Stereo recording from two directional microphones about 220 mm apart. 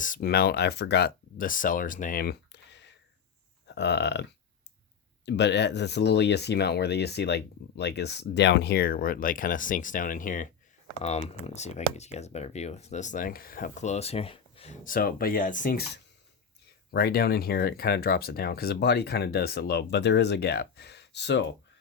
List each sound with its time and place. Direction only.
0.0 s speech: 40° left (ahead or behind)
3.7 s a sound: 50° left (ahead or behind)
5.2 s speech: 50° left (ahead or behind)